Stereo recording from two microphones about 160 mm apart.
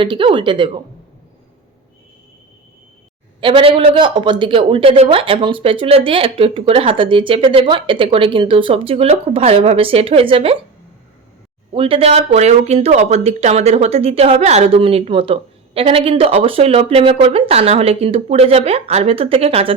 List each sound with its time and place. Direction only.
0.0 s speech: 30° right (ahead or behind)
3.4 s speech: 35° right (ahead or behind)
11.7 s speech: 35° right (ahead or behind)